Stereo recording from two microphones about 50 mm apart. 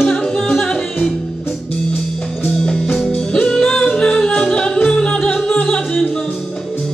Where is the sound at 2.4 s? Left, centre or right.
Centre.